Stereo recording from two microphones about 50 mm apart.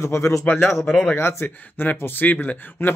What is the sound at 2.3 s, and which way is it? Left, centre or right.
Speech, left.